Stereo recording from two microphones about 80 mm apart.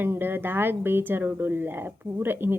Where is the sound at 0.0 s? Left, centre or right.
Right.